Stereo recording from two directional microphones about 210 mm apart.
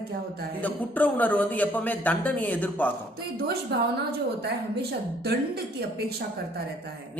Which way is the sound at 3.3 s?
50° right (ahead or behind).